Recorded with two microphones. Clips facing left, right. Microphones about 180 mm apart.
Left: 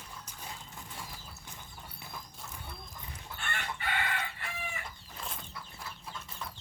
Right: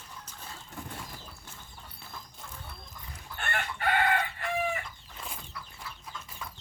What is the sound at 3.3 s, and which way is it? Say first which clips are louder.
Chicken: right 5 dB; 60° right (ahead or behind).